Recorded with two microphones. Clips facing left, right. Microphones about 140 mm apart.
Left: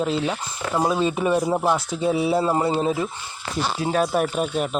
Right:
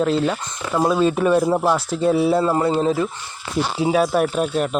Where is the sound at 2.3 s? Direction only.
20° left (ahead or behind).